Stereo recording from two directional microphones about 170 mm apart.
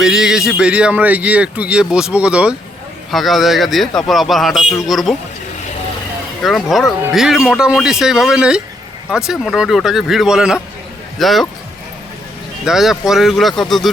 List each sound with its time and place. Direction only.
0.0 s a man's voice: 5° right (ahead or behind)
6.4 s a man's voice: centre (ahead or behind)
12.6 s a man's voice: centre (ahead or behind)